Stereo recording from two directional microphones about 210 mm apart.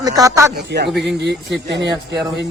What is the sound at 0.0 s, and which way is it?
Speech, 15° right (ahead or behind).